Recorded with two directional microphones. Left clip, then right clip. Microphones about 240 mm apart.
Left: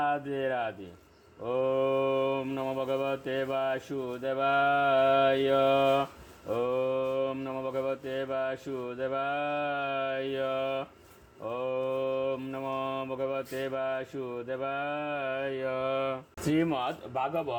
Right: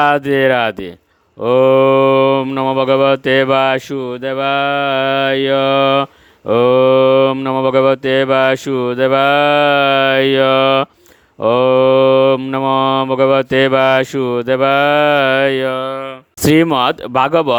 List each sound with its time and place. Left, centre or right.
0.0 s cattle: right
16.5 s cattle: right